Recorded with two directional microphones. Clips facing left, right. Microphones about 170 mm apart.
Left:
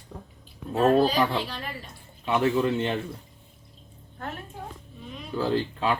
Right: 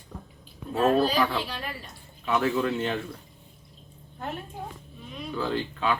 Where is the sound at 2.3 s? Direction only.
25° left (ahead or behind).